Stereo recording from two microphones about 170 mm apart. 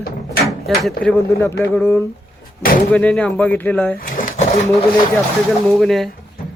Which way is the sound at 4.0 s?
55° left (ahead or behind).